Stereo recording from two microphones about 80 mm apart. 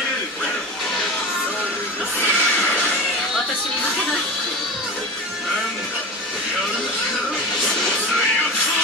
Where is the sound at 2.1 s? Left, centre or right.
Left.